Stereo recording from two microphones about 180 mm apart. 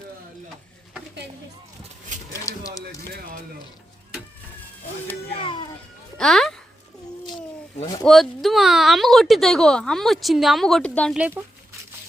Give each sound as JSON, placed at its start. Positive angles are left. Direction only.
{"t": 2.3, "sound": "a sound", "side_deg": 15}
{"t": 5.3, "sound": "music", "side_deg": 30}
{"t": 6.1, "sound": "music", "side_deg": 5}
{"t": 8.0, "sound": "a woman's voice", "side_deg": 0}
{"t": 11.2, "sound": "speech", "side_deg": -10}